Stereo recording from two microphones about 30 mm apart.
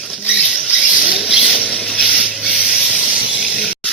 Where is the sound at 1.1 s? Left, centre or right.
Centre.